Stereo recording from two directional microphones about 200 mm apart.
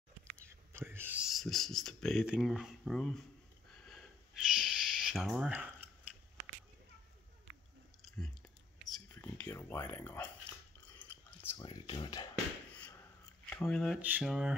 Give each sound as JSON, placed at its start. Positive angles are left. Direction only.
{"t": 0.5, "sound": "speech", "side_deg": -10}
{"t": 3.8, "sound": "a sound", "side_deg": 0}
{"t": 8.0, "sound": "a sound", "side_deg": 0}
{"t": 11.0, "sound": "whispering", "side_deg": 10}
{"t": 11.6, "sound": "speech", "side_deg": 20}
{"t": 13.5, "sound": "speech", "side_deg": 5}
{"t": 14.0, "sound": "mantra", "side_deg": -5}